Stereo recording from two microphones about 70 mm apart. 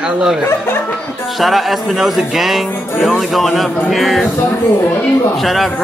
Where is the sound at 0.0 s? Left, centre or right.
Centre.